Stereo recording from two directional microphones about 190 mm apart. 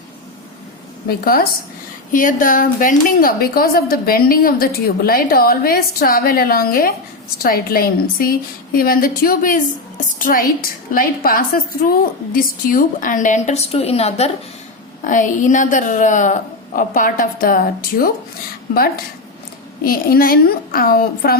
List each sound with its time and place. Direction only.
1.0 s a woman's voice: 50° left (ahead or behind)
19.8 s a woman's voice: 50° left (ahead or behind)